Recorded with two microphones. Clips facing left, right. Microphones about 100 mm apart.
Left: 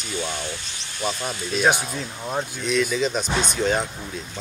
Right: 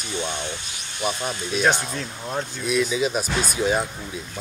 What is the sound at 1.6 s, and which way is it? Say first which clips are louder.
Speech: left 1 dB; 10° left (ahead or behind).